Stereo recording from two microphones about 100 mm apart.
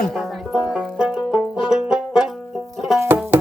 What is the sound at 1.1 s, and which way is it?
Banjo, centre (ahead or behind).